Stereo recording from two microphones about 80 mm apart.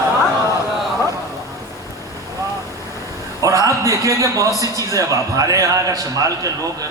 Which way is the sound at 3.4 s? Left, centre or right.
Right.